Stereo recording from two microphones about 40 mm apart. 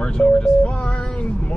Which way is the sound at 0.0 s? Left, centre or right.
Left.